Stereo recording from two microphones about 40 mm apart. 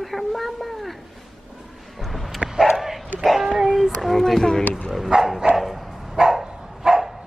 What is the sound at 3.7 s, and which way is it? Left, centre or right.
Speech, centre.